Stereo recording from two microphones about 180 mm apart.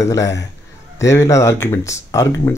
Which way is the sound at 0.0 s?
15° left (ahead or behind).